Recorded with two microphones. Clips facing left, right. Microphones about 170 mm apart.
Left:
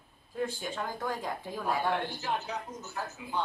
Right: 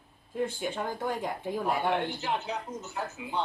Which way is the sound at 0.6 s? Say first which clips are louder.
Right 3 dB; 20° right (ahead or behind).